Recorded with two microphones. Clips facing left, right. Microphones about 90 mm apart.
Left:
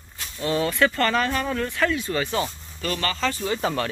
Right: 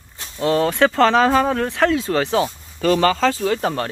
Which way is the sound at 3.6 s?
45° right (ahead or behind).